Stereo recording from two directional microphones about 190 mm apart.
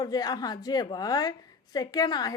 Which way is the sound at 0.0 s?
20° left (ahead or behind).